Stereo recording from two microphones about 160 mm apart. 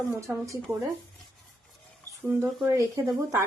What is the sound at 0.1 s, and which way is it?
Speech, 15° right (ahead or behind).